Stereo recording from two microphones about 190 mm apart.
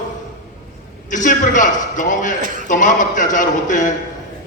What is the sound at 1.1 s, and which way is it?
A man's voice, 40° left (ahead or behind).